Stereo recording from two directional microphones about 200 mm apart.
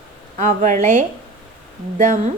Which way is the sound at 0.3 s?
40° right (ahead or behind).